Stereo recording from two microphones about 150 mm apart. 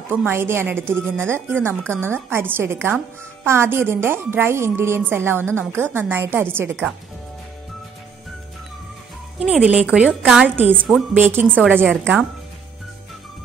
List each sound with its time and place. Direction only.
0.1 s a woman's voice: 15° right (ahead or behind)
9.4 s a woman's voice: 5° right (ahead or behind)